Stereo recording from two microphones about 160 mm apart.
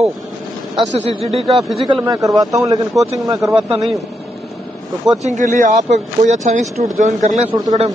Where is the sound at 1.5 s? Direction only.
Centre (ahead or behind).